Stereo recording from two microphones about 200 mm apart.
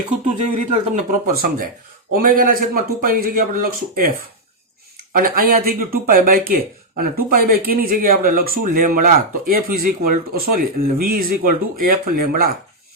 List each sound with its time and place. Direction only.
0.3 s speech: 35° right (ahead or behind)
2.1 s speech: 45° right (ahead or behind)
5.1 s speech: 45° right (ahead or behind)